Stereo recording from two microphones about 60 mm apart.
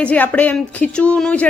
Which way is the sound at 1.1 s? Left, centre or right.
Centre.